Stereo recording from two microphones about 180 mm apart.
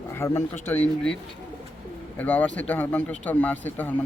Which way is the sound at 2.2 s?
10° left (ahead or behind).